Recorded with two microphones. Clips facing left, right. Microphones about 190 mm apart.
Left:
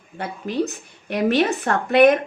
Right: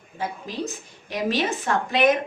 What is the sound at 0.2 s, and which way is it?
A woman's voice, 65° left (ahead or behind).